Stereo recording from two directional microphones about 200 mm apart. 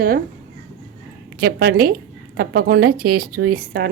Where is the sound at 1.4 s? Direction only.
50° right (ahead or behind).